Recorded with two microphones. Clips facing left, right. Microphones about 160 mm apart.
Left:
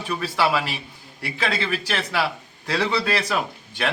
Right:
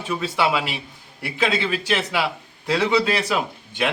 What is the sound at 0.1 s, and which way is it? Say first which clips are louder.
Speech: right 1 dB; 20° right (ahead or behind).